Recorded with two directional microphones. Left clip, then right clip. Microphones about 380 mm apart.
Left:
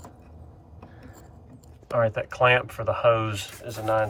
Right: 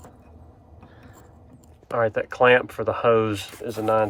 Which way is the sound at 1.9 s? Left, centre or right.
Centre.